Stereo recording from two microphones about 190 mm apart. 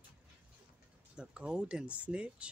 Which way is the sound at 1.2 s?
5° right (ahead or behind).